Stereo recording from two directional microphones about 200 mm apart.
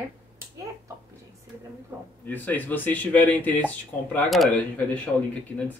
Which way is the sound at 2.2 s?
10° left (ahead or behind).